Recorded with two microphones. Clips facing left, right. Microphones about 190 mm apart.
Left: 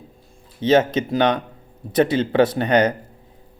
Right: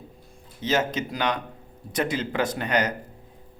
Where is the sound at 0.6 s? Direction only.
30° left (ahead or behind).